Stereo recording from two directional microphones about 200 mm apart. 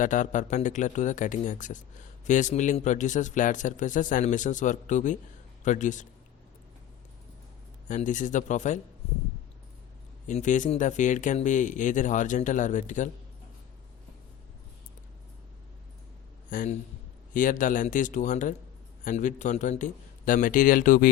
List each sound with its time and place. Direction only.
0.0 s speech: 40° left (ahead or behind)
7.9 s speech: 40° left (ahead or behind)
10.2 s speech: 40° left (ahead or behind)
16.5 s a man's voice: 40° left (ahead or behind)